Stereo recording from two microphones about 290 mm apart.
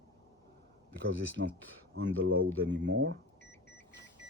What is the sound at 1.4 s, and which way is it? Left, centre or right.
Speech, right.